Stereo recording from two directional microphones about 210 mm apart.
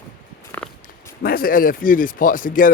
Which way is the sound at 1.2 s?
45° left (ahead or behind).